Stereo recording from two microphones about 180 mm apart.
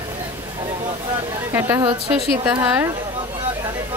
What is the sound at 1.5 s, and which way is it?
Speech, 15° right (ahead or behind).